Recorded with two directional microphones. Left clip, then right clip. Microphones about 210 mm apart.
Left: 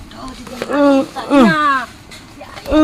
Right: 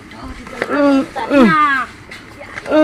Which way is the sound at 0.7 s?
35° left (ahead or behind).